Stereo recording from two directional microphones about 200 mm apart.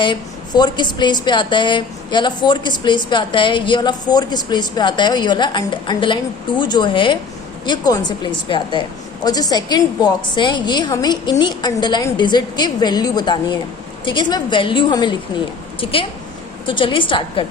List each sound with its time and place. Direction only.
0.0 s a woman's voice: 20° left (ahead or behind)